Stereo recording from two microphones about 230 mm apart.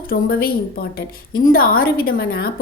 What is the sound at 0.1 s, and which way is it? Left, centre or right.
A woman's voice, left.